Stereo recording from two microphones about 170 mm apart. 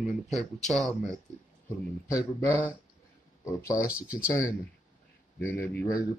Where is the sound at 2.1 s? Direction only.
15° left (ahead or behind).